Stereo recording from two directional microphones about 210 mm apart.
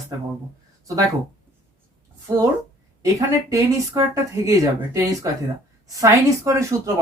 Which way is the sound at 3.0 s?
15° right (ahead or behind).